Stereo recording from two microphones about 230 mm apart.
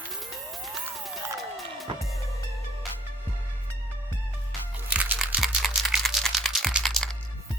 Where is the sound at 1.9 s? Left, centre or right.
Right.